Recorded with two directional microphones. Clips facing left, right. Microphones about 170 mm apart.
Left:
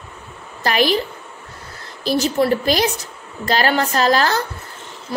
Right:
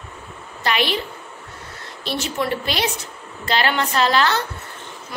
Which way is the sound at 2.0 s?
40° left (ahead or behind).